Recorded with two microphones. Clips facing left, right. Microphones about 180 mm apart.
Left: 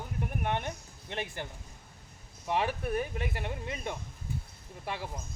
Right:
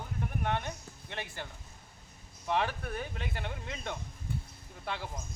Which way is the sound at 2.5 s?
15° left (ahead or behind).